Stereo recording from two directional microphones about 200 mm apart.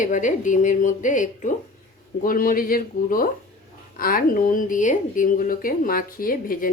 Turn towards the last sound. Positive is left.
turn(degrees=45)  # may be behind; listen again after turning